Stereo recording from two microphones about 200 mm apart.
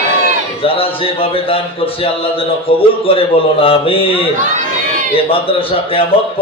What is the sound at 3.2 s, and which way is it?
Speech, 30° left (ahead or behind).